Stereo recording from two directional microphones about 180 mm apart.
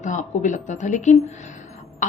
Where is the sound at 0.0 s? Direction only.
45° left (ahead or behind).